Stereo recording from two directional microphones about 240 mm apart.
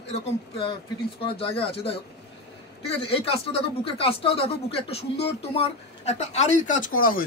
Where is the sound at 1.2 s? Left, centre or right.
Left.